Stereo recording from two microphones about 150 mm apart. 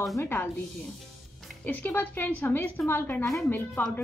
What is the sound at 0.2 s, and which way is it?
Speech, 15° left (ahead or behind).